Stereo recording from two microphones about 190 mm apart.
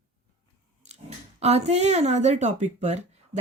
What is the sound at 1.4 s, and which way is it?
Speech, 35° right (ahead or behind).